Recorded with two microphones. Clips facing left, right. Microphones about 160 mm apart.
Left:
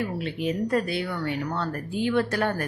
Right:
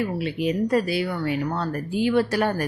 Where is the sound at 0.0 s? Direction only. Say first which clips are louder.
Right 3 dB; 10° right (ahead or behind).